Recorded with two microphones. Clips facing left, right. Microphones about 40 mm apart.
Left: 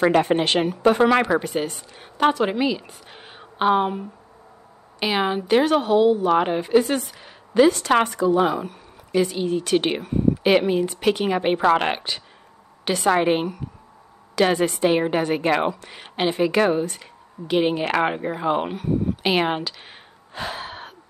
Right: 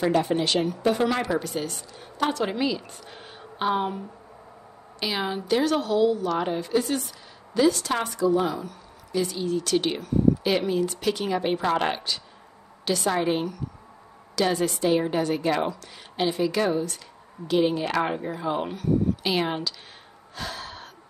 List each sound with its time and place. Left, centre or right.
0.0 s a woman's voice: left
2.3 s a woman's voice: centre
5.0 s a woman's voice: left
20.3 s gasp: left